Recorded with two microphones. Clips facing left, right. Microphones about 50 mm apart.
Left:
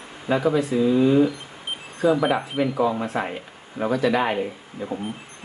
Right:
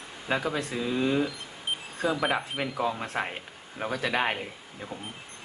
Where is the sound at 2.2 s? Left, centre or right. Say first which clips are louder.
Left 6 dB; centre.